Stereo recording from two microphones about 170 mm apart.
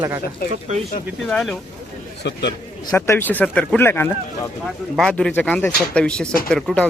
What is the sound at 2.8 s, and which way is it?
Speech, 15° left (ahead or behind).